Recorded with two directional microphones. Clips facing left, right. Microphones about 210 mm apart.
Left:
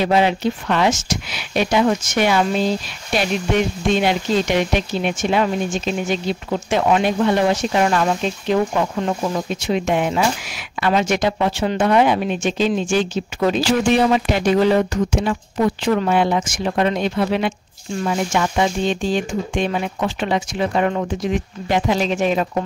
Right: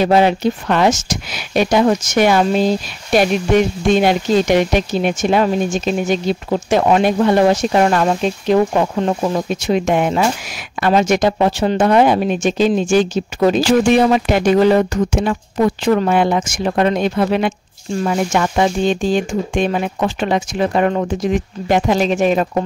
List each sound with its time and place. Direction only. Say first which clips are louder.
0.0 s speech: right 4 dB; 45° right (ahead or behind)
3.9 s speech: right 5 dB; 45° right (ahead or behind)